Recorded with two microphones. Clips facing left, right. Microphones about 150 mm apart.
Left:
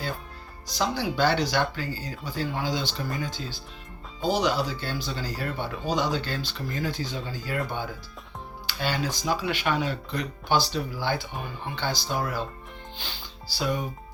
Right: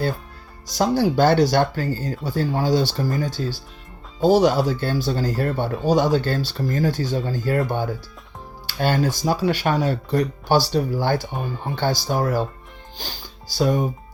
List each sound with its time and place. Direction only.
0.7 s speech: 45° right (ahead or behind)
8.6 s speech: 45° right (ahead or behind)